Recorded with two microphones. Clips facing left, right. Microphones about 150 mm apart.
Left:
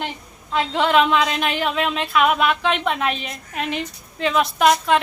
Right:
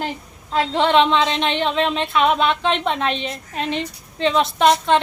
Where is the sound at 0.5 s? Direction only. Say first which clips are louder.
Right 2 dB; 30° right (ahead or behind).